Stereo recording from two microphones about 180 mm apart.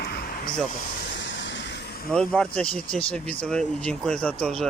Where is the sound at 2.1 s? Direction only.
5° left (ahead or behind).